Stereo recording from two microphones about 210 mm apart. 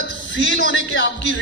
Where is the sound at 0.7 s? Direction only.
55° left (ahead or behind).